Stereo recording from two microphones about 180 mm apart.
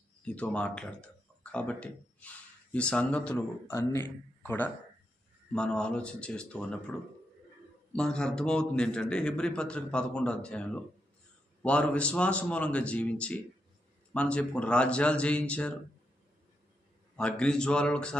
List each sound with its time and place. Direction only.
0.3 s a man's voice: 5° left (ahead or behind)
3.3 s a man's voice: 15° left (ahead or behind)
7.9 s a man's voice: 5° left (ahead or behind)
17.2 s a man's voice: 5° left (ahead or behind)